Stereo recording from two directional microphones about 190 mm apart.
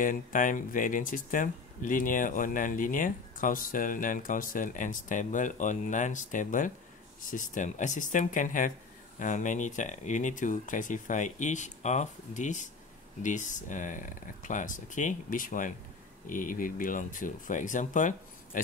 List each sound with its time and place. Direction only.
0.0 s speech: 45° left (ahead or behind)